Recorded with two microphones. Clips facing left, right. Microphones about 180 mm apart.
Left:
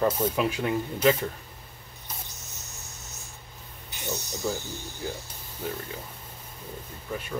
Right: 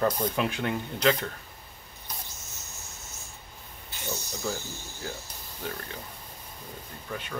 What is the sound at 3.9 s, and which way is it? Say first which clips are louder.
Spray: left 2 dB; 20° left (ahead or behind).